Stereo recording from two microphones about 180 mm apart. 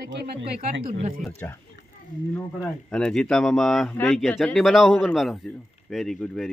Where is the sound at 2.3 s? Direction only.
5° left (ahead or behind).